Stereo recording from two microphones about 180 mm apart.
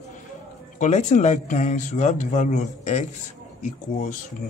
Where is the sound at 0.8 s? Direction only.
40° left (ahead or behind).